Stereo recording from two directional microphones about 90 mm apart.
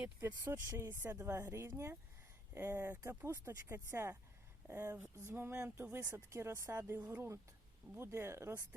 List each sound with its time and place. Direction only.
0.5 s speech: 30° right (ahead or behind)
6.7 s speech: 20° right (ahead or behind)